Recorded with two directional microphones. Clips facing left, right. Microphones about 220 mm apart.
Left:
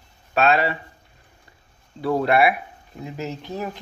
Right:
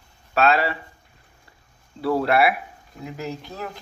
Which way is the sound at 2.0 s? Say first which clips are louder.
Left 1 dB; 20° left (ahead or behind).